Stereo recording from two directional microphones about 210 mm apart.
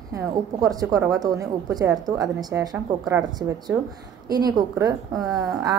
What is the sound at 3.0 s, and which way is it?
A woman's voice, centre (ahead or behind).